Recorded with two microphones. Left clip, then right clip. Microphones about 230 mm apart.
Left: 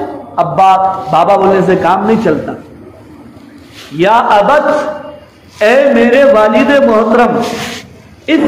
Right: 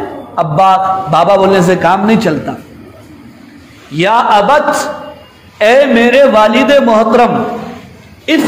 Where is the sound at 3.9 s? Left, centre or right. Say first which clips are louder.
Left 1 dB; right.